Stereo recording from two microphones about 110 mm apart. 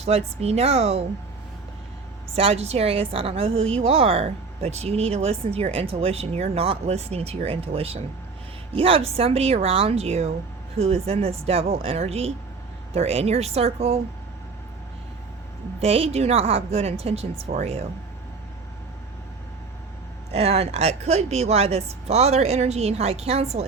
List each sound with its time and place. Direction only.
0.0 s a woman's voice: 70° right (ahead or behind)
2.3 s a woman's voice: 70° right (ahead or behind)
15.8 s a woman's voice: 65° right (ahead or behind)
20.3 s a woman's voice: 70° right (ahead or behind)